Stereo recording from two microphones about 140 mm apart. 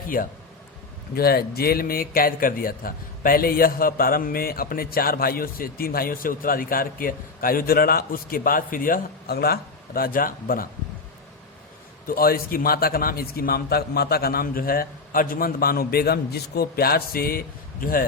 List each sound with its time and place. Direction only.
0.1 s a man's voice: 90° left
12.0 s a man's voice: 90° left